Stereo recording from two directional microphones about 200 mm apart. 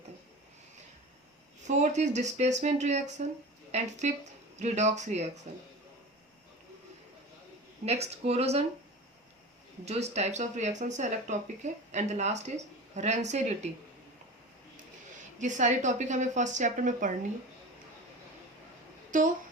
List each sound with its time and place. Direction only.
1.6 s speech: 35° right (ahead or behind)
7.9 s speech: 30° right (ahead or behind)
9.8 s speech: 35° right (ahead or behind)
15.4 s speech: 40° right (ahead or behind)
19.1 s speech: 40° right (ahead or behind)